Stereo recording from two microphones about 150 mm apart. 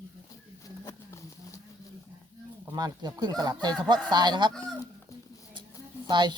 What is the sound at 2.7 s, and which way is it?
Speech, 25° right (ahead or behind).